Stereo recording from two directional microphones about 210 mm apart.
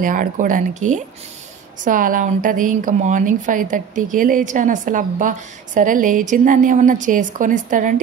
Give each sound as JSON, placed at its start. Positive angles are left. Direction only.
{"t": 0.0, "sound": "a woman's voice", "side_deg": -40}